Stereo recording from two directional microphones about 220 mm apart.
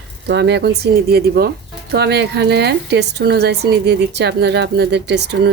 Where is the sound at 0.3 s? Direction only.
50° right (ahead or behind).